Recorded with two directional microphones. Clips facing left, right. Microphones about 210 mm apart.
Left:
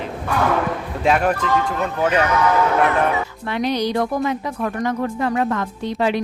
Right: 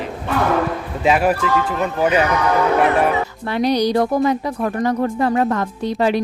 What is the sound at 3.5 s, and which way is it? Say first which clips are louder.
Speech: right 4 dB; 35° right (ahead or behind).